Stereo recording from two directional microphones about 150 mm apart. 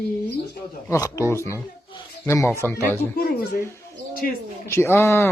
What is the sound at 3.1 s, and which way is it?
Speech, 80° left.